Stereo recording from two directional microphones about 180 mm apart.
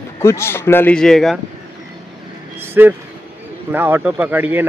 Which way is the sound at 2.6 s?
10° right (ahead or behind).